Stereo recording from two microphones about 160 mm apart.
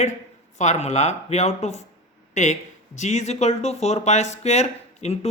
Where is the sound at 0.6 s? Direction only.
45° left (ahead or behind).